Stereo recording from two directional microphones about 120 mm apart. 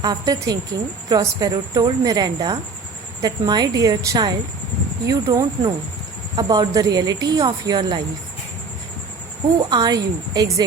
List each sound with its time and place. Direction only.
0.0 s a woman's voice: 30° right (ahead or behind)
9.6 s a woman's voice: 35° right (ahead or behind)